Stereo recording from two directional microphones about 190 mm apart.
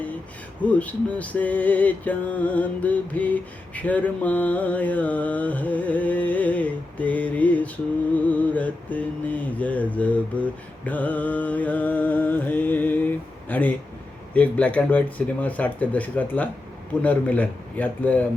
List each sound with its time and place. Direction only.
0.6 s mantra: 5° left (ahead or behind)